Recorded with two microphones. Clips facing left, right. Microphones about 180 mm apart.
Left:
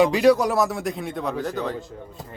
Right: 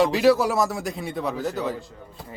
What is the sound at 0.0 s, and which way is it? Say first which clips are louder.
A man's voice: left 1 dB; centre (ahead or behind).